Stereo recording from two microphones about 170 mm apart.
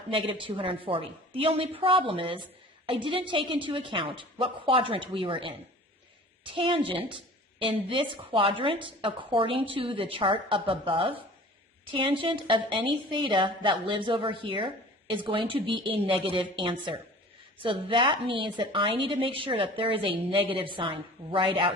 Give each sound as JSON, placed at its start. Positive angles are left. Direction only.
{"t": 0.1, "sound": "a woman's voice", "side_deg": -30}